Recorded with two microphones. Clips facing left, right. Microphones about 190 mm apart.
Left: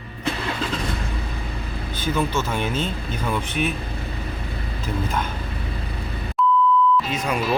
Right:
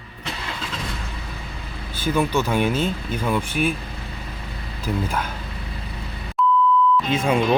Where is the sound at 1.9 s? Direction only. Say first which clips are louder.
Right 3 dB; 10° right (ahead or behind).